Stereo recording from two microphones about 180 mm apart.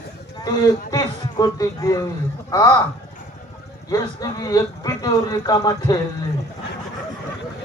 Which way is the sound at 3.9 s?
20° left (ahead or behind).